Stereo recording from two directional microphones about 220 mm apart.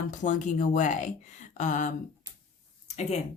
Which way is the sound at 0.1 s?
35° left (ahead or behind).